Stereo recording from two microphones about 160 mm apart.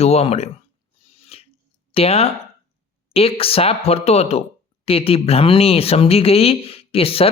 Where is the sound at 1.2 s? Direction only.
40° left (ahead or behind).